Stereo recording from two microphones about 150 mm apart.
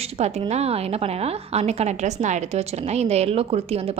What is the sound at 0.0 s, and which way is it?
A woman's voice, 45° right (ahead or behind).